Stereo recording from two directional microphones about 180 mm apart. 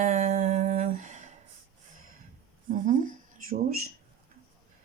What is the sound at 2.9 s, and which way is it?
Speech, 50° right (ahead or behind).